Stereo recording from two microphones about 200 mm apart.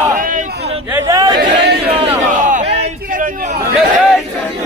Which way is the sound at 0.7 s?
30° right (ahead or behind).